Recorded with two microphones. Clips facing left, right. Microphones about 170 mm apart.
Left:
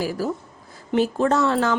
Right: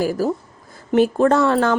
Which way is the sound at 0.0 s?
45° right (ahead or behind).